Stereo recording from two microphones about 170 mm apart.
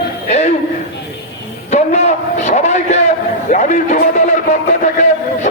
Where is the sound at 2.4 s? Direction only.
45° left (ahead or behind).